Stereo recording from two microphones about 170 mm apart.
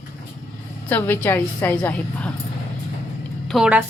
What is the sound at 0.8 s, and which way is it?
A woman's voice, 10° left (ahead or behind).